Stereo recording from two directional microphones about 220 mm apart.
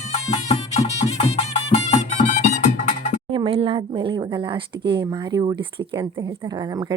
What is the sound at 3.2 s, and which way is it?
Speech, 25° right (ahead or behind).